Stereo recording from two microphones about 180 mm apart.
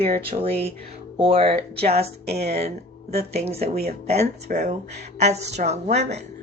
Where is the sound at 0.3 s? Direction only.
30° right (ahead or behind).